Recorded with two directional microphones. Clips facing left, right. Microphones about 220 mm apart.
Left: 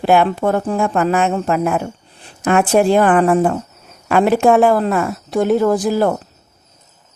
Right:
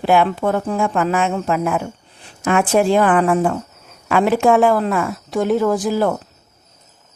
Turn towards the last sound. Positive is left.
turn(degrees=35)  # may be behind; listen again after turning